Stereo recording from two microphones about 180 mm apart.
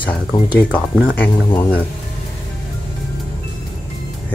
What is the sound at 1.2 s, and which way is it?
Speech, 10° left (ahead or behind).